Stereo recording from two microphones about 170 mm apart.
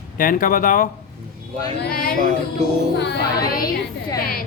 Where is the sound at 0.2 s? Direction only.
55° left (ahead or behind).